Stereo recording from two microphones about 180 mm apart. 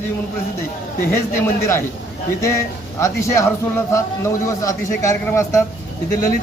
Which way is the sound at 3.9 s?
15° left (ahead or behind).